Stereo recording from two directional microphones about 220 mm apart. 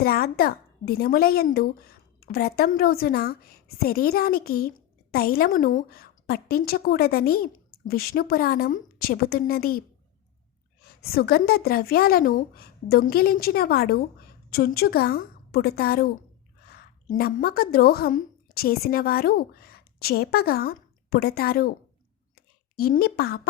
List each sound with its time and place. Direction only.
0.0 s a woman's voice: 45° left (ahead or behind)
10.8 s a woman's voice: 45° left (ahead or behind)